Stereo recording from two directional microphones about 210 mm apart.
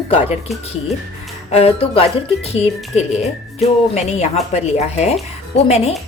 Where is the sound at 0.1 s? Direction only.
30° left (ahead or behind).